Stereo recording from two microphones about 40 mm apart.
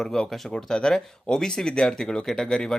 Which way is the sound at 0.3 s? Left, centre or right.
Centre.